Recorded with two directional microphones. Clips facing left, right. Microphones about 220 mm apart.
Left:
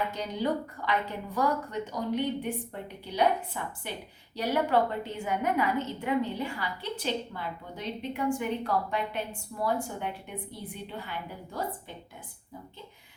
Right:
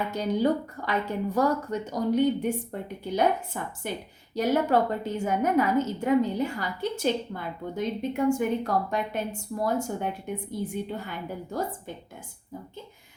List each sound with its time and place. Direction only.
0.1 s a woman's voice: 45° right (ahead or behind)